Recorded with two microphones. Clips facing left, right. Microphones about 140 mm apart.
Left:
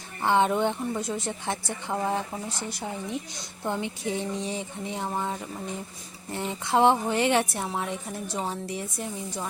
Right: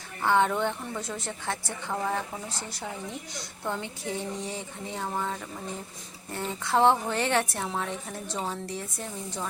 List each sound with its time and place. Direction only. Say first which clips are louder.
0.2 s a woman's voice: left 2 dB; 20° left (ahead or behind)